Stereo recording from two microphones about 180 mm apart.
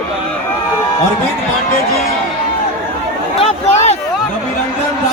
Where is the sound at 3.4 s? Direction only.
35° left (ahead or behind).